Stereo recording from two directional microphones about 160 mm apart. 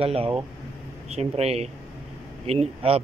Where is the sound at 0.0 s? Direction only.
35° right (ahead or behind).